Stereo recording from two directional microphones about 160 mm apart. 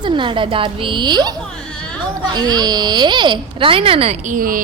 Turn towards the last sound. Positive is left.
turn(degrees=-60)  # may be behind; listen again after turning